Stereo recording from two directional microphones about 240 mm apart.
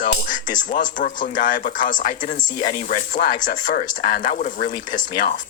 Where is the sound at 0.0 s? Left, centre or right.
Left.